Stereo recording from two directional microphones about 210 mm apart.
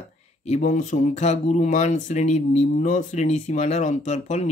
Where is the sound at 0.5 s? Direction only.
35° left (ahead or behind).